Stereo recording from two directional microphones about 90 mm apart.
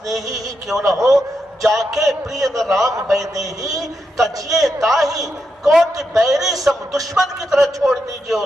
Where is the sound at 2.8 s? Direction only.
40° right (ahead or behind).